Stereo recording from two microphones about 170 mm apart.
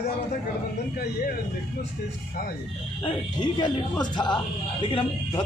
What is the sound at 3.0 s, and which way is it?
A man's voice, 30° left (ahead or behind).